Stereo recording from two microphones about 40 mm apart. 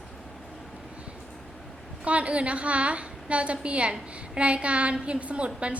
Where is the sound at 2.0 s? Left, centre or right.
Right.